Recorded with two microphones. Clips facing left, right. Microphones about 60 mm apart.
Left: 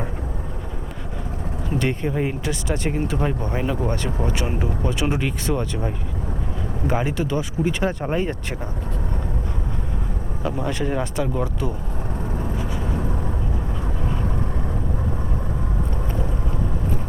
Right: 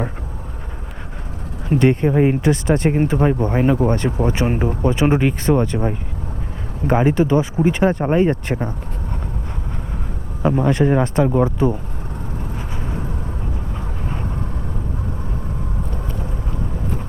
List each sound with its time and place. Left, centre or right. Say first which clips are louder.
1.8 s speech: right 9 dB; right
2.5 s speech: right 8 dB; right
10.6 s speech: right 8 dB; right